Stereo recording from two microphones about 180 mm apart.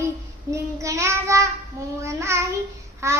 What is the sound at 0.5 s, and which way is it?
Child singing, 15° right (ahead or behind).